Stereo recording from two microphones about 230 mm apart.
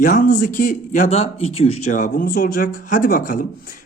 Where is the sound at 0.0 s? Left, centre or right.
Left.